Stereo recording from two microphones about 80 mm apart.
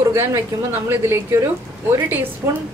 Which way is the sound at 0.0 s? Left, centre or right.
Right.